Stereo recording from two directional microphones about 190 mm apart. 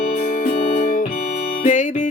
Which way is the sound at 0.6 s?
35° left (ahead or behind).